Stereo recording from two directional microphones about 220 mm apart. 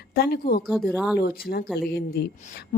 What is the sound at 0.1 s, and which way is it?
Speech, 45° left (ahead or behind).